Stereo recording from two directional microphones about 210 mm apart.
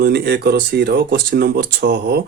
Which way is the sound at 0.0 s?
50° right (ahead or behind).